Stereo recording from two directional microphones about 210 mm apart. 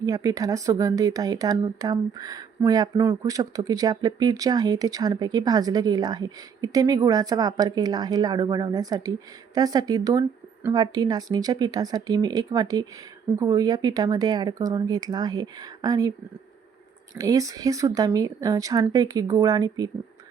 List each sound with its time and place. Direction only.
0.0 s speech: 15° right (ahead or behind)
17.2 s speech: 15° right (ahead or behind)